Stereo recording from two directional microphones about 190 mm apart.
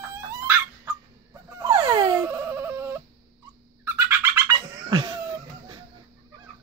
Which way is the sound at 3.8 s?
15° right (ahead or behind).